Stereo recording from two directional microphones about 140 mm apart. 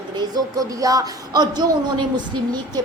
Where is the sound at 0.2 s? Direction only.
25° right (ahead or behind).